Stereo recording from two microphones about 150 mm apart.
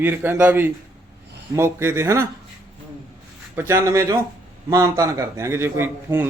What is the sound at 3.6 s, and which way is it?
A man's voice, 20° right (ahead or behind).